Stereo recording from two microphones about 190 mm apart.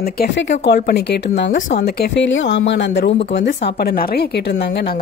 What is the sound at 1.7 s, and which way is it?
Speech, 55° left (ahead or behind).